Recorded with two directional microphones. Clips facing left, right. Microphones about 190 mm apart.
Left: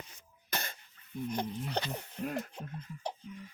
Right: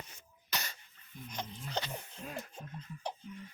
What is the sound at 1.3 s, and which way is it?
Speech, 60° left (ahead or behind).